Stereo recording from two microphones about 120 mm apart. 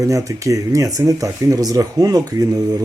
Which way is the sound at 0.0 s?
25° right (ahead or behind).